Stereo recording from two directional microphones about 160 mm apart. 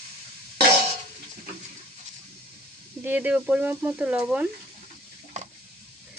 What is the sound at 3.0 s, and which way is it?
Speech, 10° right (ahead or behind).